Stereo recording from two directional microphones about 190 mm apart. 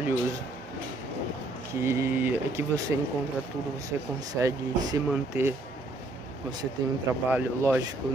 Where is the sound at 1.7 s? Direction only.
15° right (ahead or behind).